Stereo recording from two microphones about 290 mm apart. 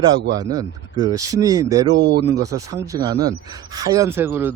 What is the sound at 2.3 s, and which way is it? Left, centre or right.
Speech, centre.